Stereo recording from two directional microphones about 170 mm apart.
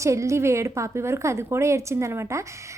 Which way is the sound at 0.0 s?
15° right (ahead or behind).